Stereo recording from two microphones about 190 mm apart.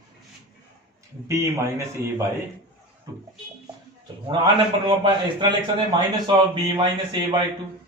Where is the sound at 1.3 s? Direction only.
15° right (ahead or behind).